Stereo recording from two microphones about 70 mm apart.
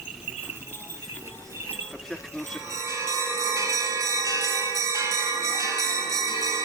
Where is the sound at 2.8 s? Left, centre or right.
Right.